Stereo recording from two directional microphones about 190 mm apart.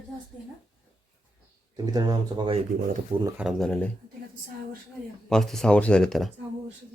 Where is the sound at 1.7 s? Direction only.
20° right (ahead or behind).